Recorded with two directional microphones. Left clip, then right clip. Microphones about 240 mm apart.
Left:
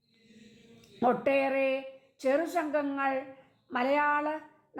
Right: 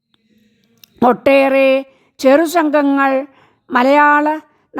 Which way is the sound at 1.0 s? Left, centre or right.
Right.